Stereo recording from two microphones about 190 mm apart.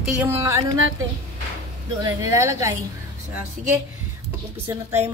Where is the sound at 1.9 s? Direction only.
15° right (ahead or behind).